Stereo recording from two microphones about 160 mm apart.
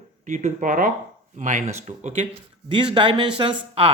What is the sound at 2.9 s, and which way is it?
Speech, 30° right (ahead or behind).